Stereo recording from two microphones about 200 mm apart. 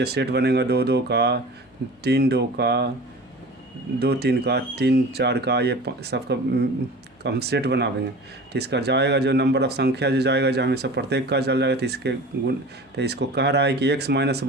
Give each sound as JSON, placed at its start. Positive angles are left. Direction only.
{"t": 0.0, "sound": "speech", "side_deg": -55}
{"t": 4.0, "sound": "speech", "side_deg": -55}